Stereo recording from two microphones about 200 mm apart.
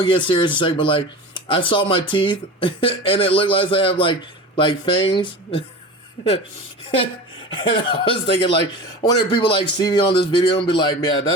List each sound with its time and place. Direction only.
0.0 s speech: 25° left (ahead or behind)
7.5 s speech: 25° left (ahead or behind)